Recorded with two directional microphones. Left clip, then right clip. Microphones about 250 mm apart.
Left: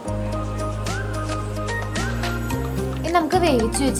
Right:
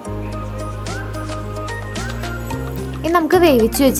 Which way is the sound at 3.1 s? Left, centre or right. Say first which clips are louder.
Right 6 dB; right.